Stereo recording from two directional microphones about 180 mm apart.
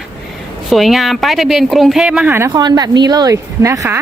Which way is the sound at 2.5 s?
20° right (ahead or behind).